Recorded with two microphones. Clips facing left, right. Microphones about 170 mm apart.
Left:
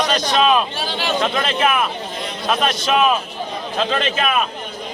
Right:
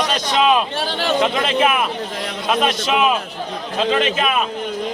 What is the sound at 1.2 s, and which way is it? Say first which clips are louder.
Speech: right 2 dB; 15° right (ahead or behind).